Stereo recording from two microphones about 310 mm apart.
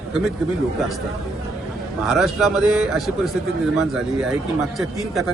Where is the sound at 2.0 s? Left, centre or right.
Centre.